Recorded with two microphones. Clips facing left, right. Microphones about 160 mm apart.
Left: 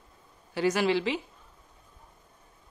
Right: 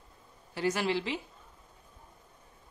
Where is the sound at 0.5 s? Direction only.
90° left.